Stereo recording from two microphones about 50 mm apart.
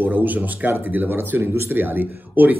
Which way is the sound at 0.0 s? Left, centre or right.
Right.